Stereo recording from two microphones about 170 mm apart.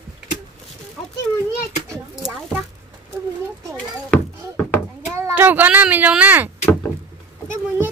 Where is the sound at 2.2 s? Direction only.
Centre (ahead or behind).